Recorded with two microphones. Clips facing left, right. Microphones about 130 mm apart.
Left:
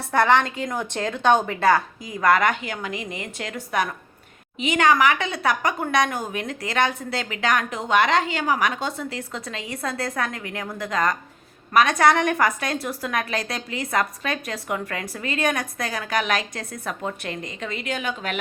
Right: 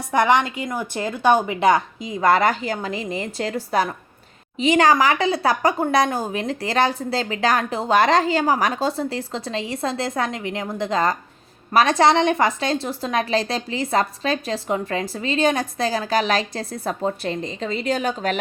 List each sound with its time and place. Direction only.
0.1 s a woman's voice: 15° right (ahead or behind); by 18.3 s 35° right (ahead or behind)